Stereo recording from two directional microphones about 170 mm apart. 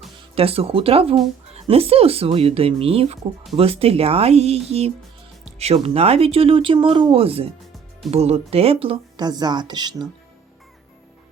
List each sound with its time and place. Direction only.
0.3 s a woman's voice: 35° right (ahead or behind)